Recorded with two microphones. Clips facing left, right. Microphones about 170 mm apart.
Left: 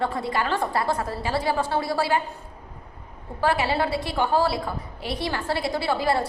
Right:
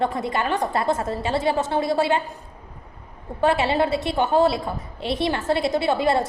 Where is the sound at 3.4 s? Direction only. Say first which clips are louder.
Right 3 dB; 25° right (ahead or behind).